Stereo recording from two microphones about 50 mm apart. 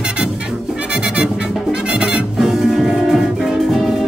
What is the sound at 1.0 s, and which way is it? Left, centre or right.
Music, centre.